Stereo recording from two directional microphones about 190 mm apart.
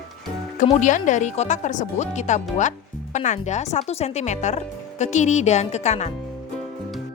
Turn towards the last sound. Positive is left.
turn(degrees=35)  # may be behind; listen again after turning